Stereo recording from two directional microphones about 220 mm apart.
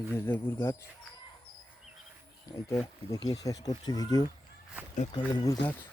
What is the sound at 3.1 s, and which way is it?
Speech, 15° left (ahead or behind).